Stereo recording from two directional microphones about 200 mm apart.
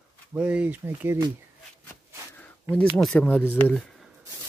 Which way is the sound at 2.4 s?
5° left (ahead or behind).